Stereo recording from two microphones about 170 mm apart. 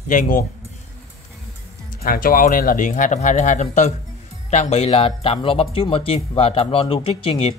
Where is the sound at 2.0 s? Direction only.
60° left (ahead or behind); by 7.5 s 35° left (ahead or behind).